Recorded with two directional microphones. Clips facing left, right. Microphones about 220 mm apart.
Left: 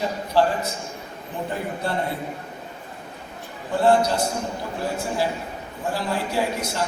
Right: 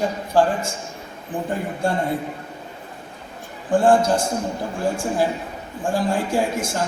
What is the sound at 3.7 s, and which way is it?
Speech, 50° right (ahead or behind).